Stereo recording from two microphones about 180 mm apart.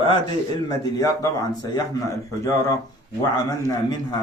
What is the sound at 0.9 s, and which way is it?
A man's voice, 20° left (ahead or behind).